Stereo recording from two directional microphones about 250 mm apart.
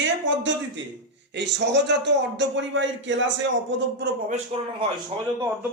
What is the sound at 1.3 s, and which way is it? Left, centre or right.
A man's voice, right.